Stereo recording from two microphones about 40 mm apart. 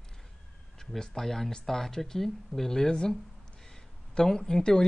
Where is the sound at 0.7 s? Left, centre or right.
Centre.